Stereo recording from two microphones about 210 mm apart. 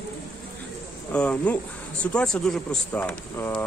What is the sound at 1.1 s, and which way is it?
Speech, 5° left (ahead or behind).